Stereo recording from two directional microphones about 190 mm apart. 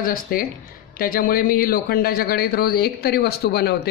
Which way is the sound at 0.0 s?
50° left (ahead or behind).